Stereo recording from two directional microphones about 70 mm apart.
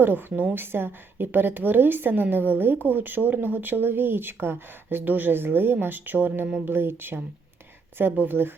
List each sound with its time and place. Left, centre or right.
0.0 s a woman's voice: right